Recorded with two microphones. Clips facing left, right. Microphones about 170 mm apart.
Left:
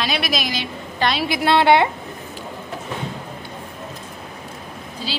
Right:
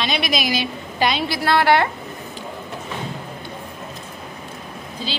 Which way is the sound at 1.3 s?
20° left (ahead or behind).